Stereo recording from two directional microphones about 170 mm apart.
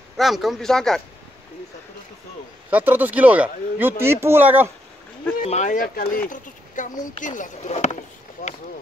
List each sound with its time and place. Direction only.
0.2 s speech: centre (ahead or behind)
2.7 s speech: 10° right (ahead or behind)
5.5 s speech: 45° left (ahead or behind)